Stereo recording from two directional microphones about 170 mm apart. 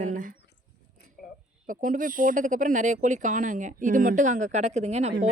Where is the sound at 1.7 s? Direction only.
50° right (ahead or behind).